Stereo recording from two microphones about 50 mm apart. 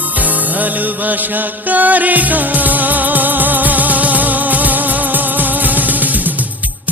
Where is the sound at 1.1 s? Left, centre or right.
Right.